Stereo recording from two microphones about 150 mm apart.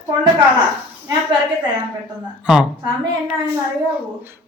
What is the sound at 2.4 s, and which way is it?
Speech, 10° right (ahead or behind).